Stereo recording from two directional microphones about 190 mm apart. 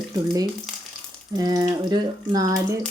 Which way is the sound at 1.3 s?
20° right (ahead or behind).